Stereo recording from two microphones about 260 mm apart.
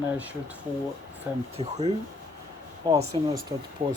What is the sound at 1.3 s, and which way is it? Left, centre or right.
Speech, centre.